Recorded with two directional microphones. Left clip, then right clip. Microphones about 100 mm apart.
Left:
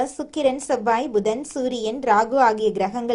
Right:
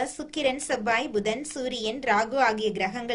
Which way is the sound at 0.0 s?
50° left (ahead or behind).